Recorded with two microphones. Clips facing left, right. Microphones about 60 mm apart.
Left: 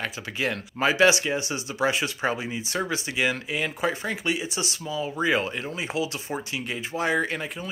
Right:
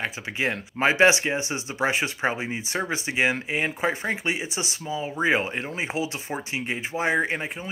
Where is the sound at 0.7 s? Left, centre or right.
Right.